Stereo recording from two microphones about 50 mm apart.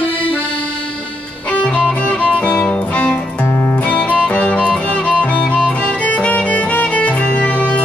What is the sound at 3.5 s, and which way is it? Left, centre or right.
Music, left.